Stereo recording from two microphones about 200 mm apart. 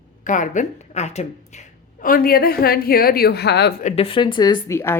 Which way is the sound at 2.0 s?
45° left (ahead or behind).